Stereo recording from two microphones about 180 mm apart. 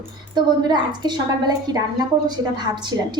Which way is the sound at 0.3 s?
25° right (ahead or behind).